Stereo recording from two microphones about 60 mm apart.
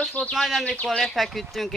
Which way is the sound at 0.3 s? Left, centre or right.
Centre.